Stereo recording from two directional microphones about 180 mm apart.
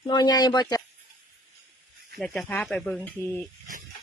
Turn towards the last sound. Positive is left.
turn(degrees=10)  # may be behind; listen again after turning